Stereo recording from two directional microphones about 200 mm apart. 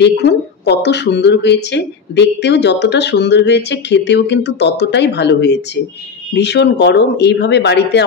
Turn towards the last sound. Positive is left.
turn(degrees=60)  # may be behind; listen again after turning